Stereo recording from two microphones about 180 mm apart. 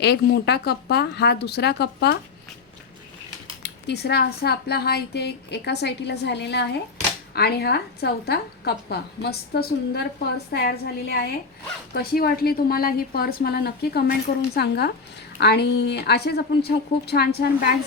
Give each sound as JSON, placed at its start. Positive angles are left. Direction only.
{"t": 0.0, "sound": "a woman's voice", "side_deg": 65}
{"t": 3.6, "sound": "a woman's voice", "side_deg": 70}